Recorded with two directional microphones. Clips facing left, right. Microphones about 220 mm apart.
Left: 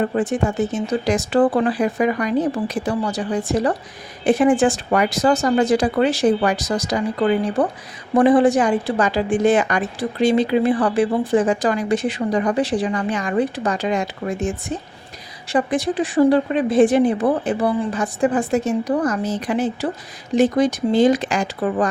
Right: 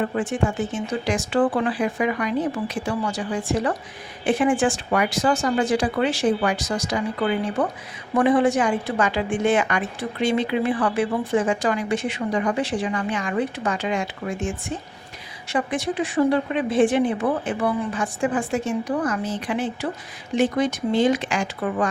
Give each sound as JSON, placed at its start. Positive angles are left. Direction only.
{"t": 0.1, "sound": "a woman's voice", "side_deg": 35}